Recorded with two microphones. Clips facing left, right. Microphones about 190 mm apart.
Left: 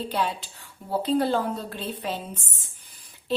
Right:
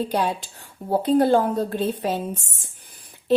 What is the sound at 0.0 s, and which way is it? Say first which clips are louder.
A woman's voice: right 4 dB; 45° right (ahead or behind).